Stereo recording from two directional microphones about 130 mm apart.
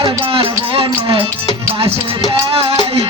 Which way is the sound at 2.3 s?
45° right (ahead or behind).